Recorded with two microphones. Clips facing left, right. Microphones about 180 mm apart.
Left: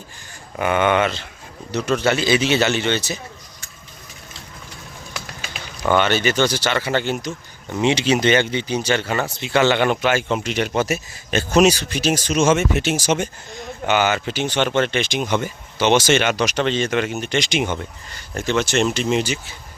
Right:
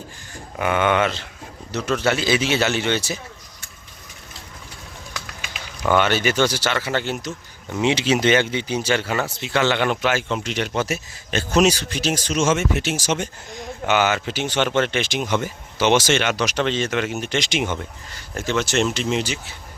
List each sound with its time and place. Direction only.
0.6 s speech: centre (ahead or behind)
5.4 s a sound: 35° left (ahead or behind)
5.9 s speech: 5° right (ahead or behind); by 13.1 s 20° left (ahead or behind)
13.8 s speech: centre (ahead or behind)